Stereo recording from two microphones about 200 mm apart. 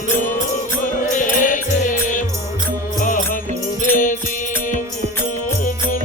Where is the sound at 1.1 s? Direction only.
40° left (ahead or behind).